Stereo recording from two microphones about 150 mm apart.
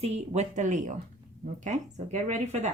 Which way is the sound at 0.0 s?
45° right (ahead or behind).